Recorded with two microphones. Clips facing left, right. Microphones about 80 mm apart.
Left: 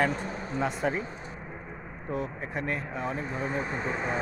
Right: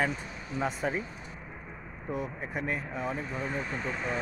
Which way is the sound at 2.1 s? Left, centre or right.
Centre.